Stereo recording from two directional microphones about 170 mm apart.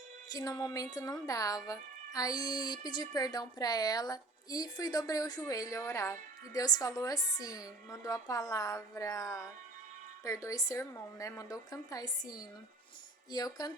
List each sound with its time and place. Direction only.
0.3 s music: 20° left (ahead or behind)